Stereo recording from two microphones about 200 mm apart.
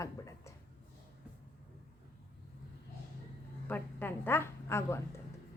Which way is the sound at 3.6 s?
10° left (ahead or behind).